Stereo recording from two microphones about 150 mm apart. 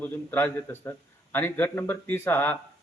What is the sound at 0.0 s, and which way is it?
A man's voice, 10° left (ahead or behind).